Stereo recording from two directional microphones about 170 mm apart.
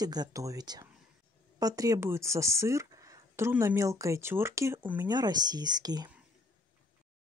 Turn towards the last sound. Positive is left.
turn(degrees=-25)  # may be behind; listen again after turning